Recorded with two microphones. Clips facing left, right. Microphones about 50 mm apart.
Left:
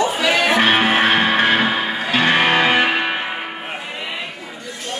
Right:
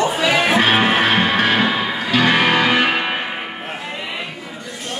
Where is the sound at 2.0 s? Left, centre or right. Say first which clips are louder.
Right 1 dB; left.